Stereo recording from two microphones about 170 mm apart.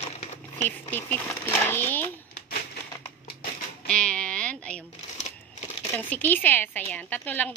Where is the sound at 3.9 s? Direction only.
5° left (ahead or behind).